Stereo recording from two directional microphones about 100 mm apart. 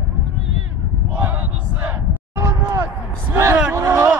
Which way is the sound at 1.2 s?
20° right (ahead or behind).